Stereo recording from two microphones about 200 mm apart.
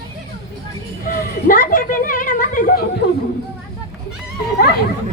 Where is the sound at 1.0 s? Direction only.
45° left (ahead or behind).